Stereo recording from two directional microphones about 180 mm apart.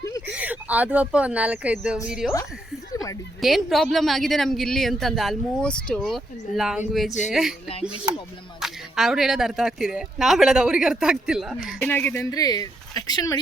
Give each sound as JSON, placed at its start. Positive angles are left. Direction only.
{"t": 0.3, "sound": "a woman's voice", "side_deg": -10}
{"t": 2.9, "sound": "a sound", "side_deg": 20}
{"t": 3.4, "sound": "a woman's voice", "side_deg": 0}
{"t": 8.6, "sound": "a woman's voice", "side_deg": 0}
{"t": 11.8, "sound": "speech", "side_deg": 10}